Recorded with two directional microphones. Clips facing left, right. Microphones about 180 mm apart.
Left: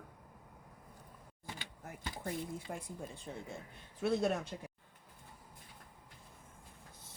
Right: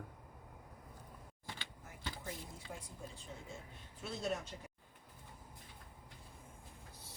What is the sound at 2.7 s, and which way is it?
Speech, 55° left (ahead or behind).